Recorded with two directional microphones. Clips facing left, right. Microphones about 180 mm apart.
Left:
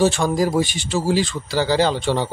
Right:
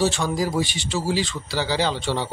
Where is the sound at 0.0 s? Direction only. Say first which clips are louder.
Left 5 dB; 50° left (ahead or behind).